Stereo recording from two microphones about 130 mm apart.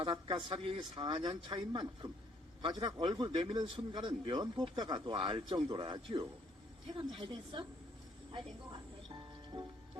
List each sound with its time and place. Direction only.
0.0 s a man's voice: 40° right (ahead or behind)
8.7 s music: 35° right (ahead or behind)